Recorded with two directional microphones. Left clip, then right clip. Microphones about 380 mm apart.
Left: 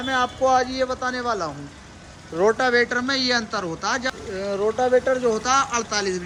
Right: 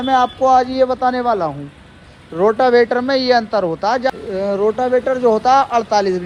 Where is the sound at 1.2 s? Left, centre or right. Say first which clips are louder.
Right 8 dB; centre.